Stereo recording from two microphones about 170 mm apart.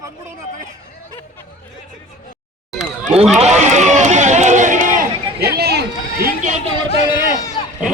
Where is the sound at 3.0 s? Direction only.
35° right (ahead or behind).